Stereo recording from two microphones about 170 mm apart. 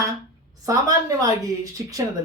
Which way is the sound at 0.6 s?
20° right (ahead or behind).